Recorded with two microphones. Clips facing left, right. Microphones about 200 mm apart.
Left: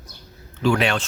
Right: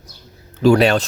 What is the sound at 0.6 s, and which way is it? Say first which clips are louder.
Speech: right 7 dB; 40° right (ahead or behind).